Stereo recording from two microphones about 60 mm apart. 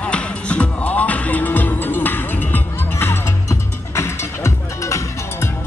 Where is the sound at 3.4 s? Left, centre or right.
Left.